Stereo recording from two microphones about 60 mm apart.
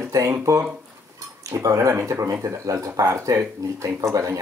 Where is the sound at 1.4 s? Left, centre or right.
Right.